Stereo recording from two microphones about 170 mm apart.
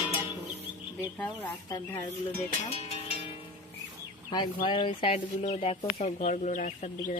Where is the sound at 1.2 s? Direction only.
10° left (ahead or behind).